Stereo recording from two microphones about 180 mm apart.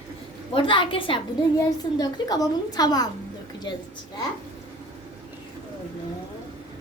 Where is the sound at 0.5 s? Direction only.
30° left (ahead or behind).